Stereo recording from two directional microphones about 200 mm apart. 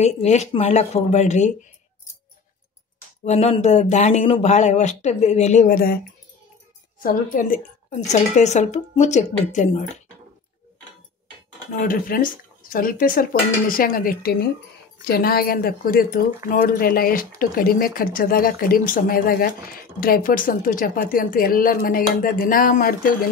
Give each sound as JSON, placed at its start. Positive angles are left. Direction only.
{"t": 0.0, "sound": "speech", "side_deg": 35}
{"t": 3.3, "sound": "speech", "side_deg": 30}
{"t": 7.0, "sound": "speech", "side_deg": 45}
{"t": 11.8, "sound": "speech", "side_deg": 45}